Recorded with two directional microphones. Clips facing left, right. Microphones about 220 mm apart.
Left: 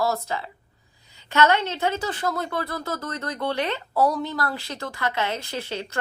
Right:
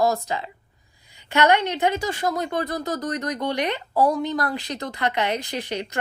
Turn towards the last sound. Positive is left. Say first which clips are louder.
# right 2 dB
turn(degrees=-15)  # may be behind; listen again after turning